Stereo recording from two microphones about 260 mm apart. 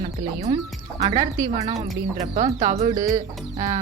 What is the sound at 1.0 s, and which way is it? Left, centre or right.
A woman's voice, centre.